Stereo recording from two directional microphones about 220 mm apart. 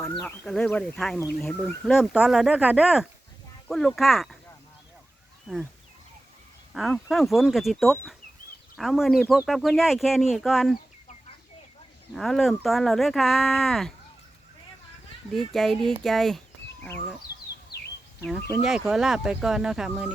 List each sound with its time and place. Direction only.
0.2 s speech: 5° left (ahead or behind)
5.5 s speech: 5° left (ahead or behind)
6.7 s speech: centre (ahead or behind)
12.1 s speech: centre (ahead or behind)
15.3 s speech: centre (ahead or behind)
17.7 s bird: 45° left (ahead or behind)
18.3 s speech: centre (ahead or behind)